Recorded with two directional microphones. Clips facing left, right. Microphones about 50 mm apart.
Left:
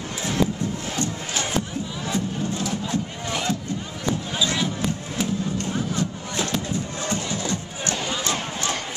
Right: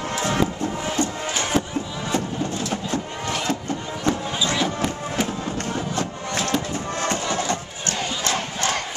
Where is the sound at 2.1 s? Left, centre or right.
Right.